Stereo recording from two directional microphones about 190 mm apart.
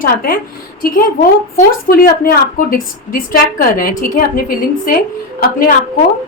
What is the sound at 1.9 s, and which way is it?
A woman's voice, 50° left (ahead or behind).